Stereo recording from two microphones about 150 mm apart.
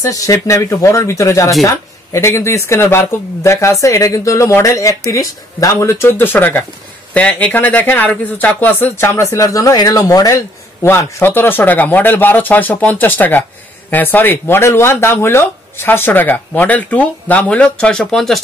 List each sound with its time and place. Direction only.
0.1 s speech: 20° left (ahead or behind); by 18.4 s centre (ahead or behind)